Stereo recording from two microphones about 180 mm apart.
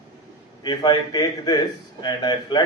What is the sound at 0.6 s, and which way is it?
A man's voice, 25° left (ahead or behind).